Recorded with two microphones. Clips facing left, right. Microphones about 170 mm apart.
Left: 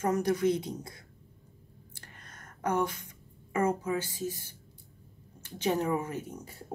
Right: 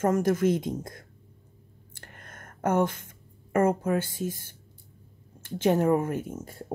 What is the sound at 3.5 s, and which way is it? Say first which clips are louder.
Speech: right 5 dB; 55° right (ahead or behind).